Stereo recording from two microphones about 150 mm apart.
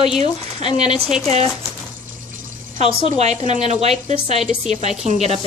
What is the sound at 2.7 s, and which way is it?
A woman's voice, 50° right (ahead or behind).